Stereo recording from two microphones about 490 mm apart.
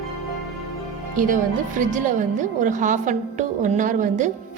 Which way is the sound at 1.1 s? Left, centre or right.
Centre.